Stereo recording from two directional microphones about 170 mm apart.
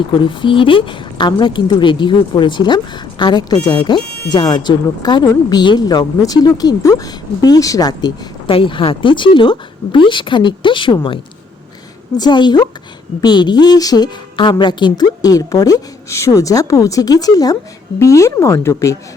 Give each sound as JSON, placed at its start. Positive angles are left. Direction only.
{"t": 0.3, "sound": "a woman's voice", "side_deg": 30}